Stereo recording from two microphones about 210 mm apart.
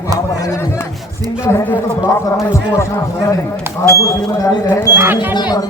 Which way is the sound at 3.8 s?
15° left (ahead or behind).